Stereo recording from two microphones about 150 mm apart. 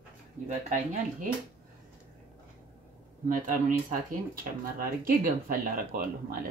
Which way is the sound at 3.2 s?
60° right (ahead or behind).